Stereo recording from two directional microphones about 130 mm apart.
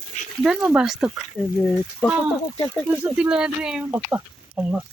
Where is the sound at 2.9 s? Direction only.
10° right (ahead or behind).